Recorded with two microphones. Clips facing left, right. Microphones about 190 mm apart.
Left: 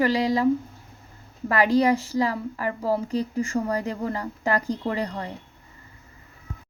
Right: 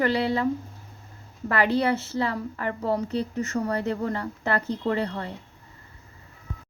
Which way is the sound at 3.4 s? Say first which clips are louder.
Left 2 dB; 10° left (ahead or behind).